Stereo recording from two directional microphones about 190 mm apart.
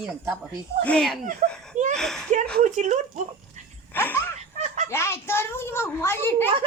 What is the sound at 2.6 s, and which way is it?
Speech, 40° right (ahead or behind).